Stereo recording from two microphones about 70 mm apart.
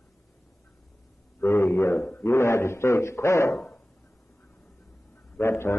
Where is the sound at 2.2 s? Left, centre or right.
Left.